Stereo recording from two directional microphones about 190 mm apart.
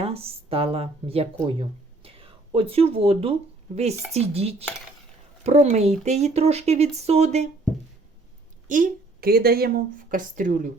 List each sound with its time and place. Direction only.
0.0 s speech: 30° right (ahead or behind)
8.6 s speech: 45° right (ahead or behind)